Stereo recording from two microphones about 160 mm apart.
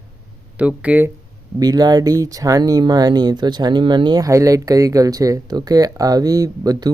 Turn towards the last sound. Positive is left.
turn(degrees=-25)  # may be behind; listen again after turning